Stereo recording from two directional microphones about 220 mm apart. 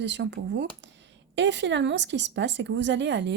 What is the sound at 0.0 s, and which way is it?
Speech, 55° right (ahead or behind).